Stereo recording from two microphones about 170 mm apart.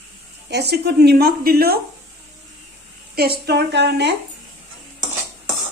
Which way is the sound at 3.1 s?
65° right (ahead or behind).